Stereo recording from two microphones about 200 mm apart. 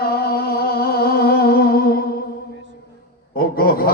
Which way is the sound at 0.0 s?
50° left (ahead or behind).